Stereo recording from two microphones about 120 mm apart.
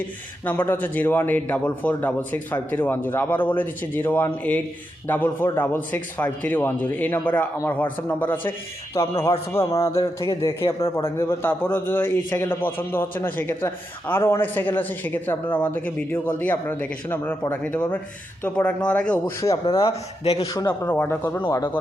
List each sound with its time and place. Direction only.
0.4 s a man's voice: 15° left (ahead or behind)
19.8 s a man's voice: 55° left (ahead or behind)
20.4 s a man's voice: 30° left (ahead or behind)